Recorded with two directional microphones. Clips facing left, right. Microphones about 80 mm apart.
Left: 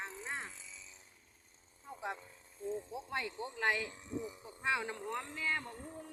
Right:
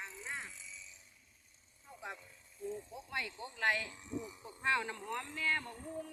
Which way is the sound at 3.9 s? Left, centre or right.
Left.